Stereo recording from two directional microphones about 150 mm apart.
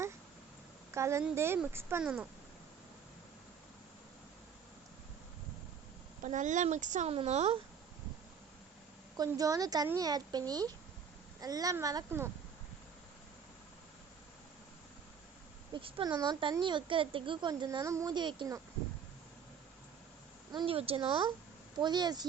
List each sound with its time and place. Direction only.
0.9 s a woman's voice: 20° right (ahead or behind)
6.2 s speech: 55° right (ahead or behind)
7.1 s speech: 45° right (ahead or behind)
9.1 s speech: 25° right (ahead or behind)
15.7 s speech: 35° right (ahead or behind)
20.5 s speech: 35° right (ahead or behind)